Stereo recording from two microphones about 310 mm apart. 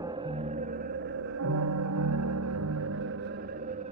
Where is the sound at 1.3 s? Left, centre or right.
Right.